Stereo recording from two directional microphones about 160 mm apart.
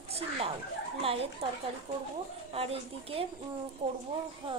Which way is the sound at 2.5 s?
35° right (ahead or behind).